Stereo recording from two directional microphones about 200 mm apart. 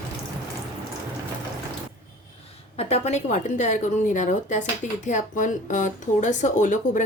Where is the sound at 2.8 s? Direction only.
30° left (ahead or behind).